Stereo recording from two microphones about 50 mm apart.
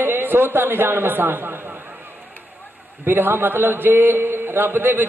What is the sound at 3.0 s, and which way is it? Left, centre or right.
A man's voice, right.